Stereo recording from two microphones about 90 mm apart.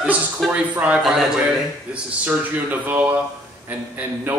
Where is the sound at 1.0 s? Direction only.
5° right (ahead or behind).